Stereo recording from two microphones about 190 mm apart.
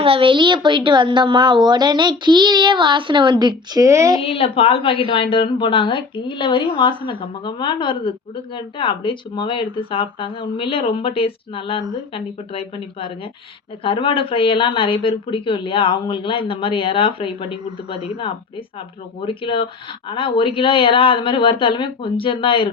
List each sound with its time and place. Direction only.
0.0 s a child's voice: 30° right (ahead or behind)
4.2 s a woman's voice: 30° left (ahead or behind)
19.2 s a woman's voice: 25° left (ahead or behind)